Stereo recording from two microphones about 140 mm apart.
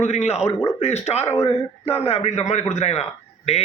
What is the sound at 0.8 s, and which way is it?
Speech, 50° left (ahead or behind).